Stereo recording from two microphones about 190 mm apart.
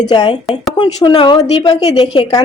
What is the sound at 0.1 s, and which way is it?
A woman's voice, 20° left (ahead or behind).